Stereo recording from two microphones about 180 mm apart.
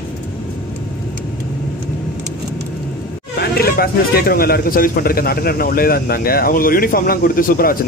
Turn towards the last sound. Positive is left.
turn(degrees=55)  # may be behind; listen again after turning